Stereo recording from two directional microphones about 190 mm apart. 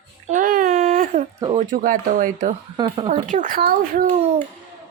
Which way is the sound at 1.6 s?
45° right (ahead or behind).